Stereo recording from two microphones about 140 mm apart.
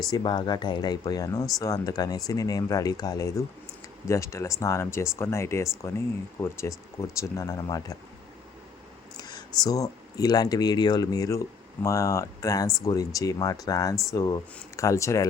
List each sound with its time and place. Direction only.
0.1 s speech: 30° left (ahead or behind)
9.1 s speech: 30° left (ahead or behind)